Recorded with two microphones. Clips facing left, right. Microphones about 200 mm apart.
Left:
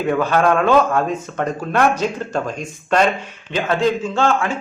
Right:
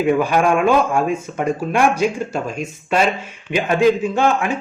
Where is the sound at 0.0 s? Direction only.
10° right (ahead or behind).